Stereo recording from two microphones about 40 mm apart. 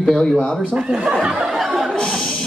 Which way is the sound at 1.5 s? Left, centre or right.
Centre.